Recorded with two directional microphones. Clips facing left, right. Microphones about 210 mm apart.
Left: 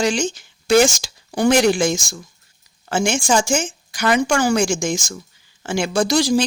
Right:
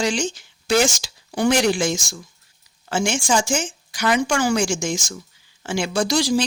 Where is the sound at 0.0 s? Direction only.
45° left (ahead or behind).